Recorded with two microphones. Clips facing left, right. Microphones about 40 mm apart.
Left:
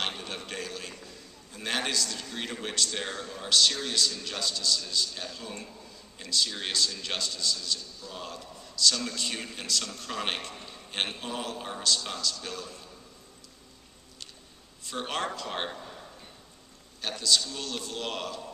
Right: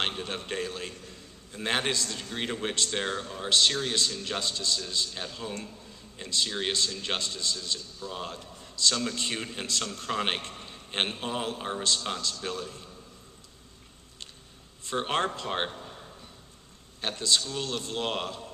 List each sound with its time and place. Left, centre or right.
0.0 s a man's voice: right
14.9 s a man's voice: right
15.7 s a sound: centre
17.0 s a man's voice: right